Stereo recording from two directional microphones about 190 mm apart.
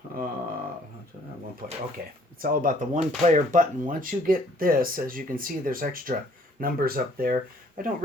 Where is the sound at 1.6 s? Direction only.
45° right (ahead or behind).